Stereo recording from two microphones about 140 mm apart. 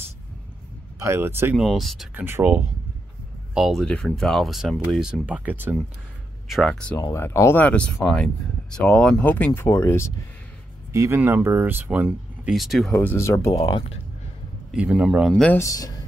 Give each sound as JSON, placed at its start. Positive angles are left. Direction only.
{"t": 0.9, "sound": "speech", "side_deg": -20}
{"t": 1.6, "sound": "speech", "side_deg": 0}
{"t": 2.1, "sound": "speech", "side_deg": -15}
{"t": 3.5, "sound": "speech", "side_deg": 0}
{"t": 6.5, "sound": "speech", "side_deg": 0}
{"t": 7.0, "sound": "speech", "side_deg": 20}
{"t": 10.9, "sound": "speech", "side_deg": -20}
{"t": 12.9, "sound": "speech", "side_deg": 15}
{"t": 13.6, "sound": "speech", "side_deg": 40}
{"t": 14.7, "sound": "speech", "side_deg": -5}
{"t": 15.4, "sound": "speech", "side_deg": 20}